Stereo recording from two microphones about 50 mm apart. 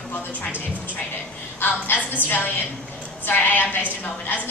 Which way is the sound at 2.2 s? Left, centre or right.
Left.